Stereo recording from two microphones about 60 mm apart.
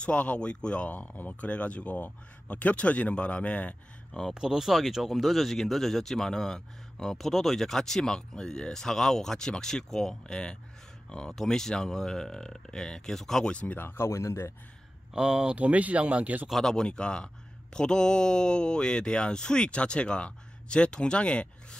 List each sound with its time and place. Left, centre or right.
0.0 s speech: centre
4.3 s speech: centre
13.5 s speech: left
13.7 s speech: left
15.1 s speech: centre
16.4 s speech: centre